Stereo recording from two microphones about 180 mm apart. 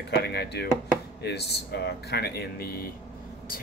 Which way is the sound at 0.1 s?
65° left (ahead or behind).